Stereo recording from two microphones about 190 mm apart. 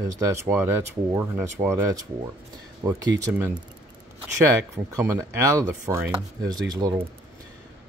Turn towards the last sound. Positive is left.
turn(degrees=-20)  # may be behind; listen again after turning